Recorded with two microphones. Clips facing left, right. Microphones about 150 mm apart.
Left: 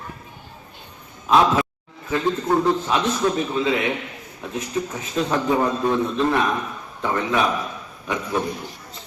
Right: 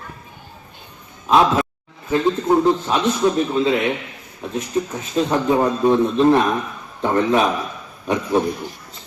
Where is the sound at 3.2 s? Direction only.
15° right (ahead or behind).